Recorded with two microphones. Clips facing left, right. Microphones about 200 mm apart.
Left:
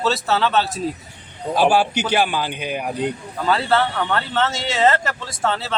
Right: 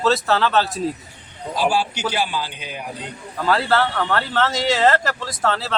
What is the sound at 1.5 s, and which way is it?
A man's voice, 60° left (ahead or behind).